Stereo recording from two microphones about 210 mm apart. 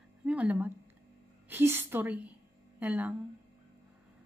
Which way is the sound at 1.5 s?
10° right (ahead or behind).